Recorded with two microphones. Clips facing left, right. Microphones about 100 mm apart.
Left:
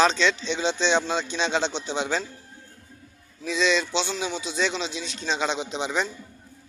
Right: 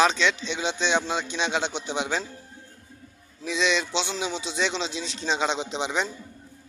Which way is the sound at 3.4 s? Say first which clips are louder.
Left 2 dB; 15° right (ahead or behind).